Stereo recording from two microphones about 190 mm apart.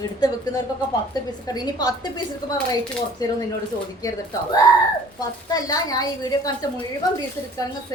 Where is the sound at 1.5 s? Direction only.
20° left (ahead or behind).